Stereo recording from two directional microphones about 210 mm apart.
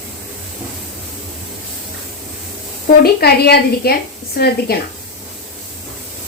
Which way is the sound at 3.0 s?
50° left (ahead or behind).